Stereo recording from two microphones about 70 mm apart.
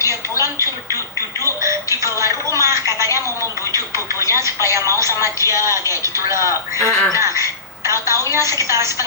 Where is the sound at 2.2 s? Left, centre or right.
Right.